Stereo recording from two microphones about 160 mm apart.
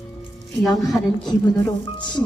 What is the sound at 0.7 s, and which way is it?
Speech, 20° left (ahead or behind).